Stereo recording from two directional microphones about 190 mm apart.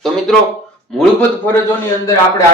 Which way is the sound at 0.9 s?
10° left (ahead or behind).